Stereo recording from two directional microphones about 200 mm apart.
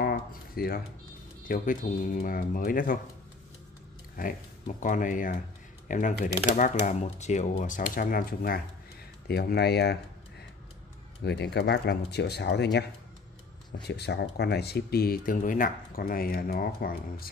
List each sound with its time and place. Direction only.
0.0 s a sound: 50° left (ahead or behind)
1.5 s speech: 40° left (ahead or behind)
4.2 s speech: 40° left (ahead or behind)
11.2 s speech: 55° left (ahead or behind)
13.7 s speech: 55° left (ahead or behind)